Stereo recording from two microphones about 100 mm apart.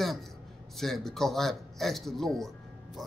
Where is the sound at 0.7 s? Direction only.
Centre (ahead or behind).